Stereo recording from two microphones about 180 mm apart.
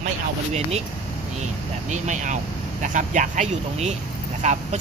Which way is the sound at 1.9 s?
40° right (ahead or behind).